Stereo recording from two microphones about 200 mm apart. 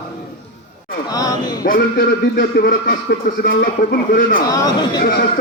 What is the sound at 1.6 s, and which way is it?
A man's voice, 45° left (ahead or behind).